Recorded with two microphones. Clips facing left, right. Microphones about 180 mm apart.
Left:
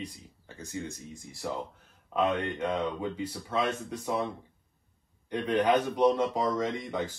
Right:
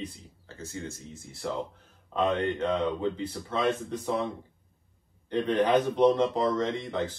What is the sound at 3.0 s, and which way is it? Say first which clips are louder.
Speech: right 3 dB; 10° left (ahead or behind).